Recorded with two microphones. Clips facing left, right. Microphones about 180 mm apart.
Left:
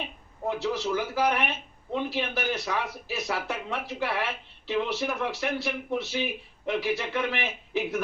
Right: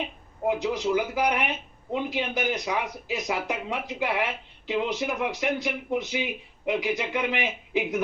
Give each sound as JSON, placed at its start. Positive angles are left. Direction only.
{"t": 0.4, "sound": "speech", "side_deg": -15}